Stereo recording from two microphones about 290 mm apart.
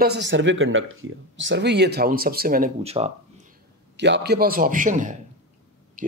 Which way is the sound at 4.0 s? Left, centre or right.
Right.